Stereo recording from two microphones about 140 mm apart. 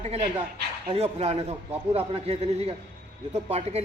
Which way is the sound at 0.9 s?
50° right (ahead or behind).